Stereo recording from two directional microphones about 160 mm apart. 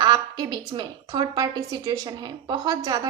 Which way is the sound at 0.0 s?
25° right (ahead or behind).